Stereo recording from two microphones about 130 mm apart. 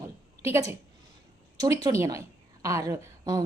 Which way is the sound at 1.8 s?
25° right (ahead or behind).